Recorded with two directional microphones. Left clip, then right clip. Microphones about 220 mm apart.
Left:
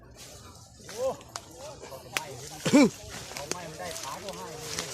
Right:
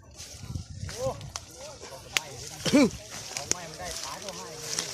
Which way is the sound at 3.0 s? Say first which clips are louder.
Right 3 dB; 25° right (ahead or behind).